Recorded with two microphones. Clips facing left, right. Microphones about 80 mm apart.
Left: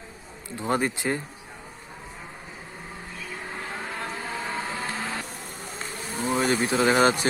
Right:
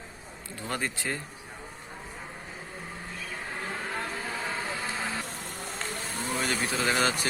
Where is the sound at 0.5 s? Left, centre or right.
Left.